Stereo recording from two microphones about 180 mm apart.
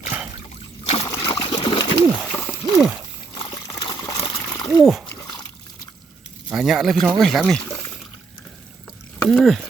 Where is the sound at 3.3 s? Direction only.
25° left (ahead or behind).